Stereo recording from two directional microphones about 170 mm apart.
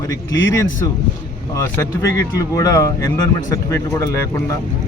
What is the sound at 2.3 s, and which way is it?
Speech, 20° left (ahead or behind).